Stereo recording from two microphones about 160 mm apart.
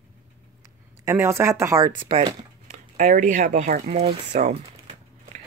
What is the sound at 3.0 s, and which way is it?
Speech, 55° right (ahead or behind).